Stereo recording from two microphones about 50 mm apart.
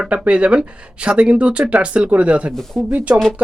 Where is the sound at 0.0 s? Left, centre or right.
Right.